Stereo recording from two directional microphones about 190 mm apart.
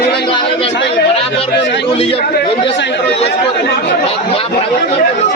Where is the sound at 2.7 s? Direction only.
70° left (ahead or behind).